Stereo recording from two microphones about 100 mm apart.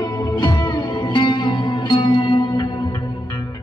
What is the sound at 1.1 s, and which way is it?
Music, 50° left (ahead or behind).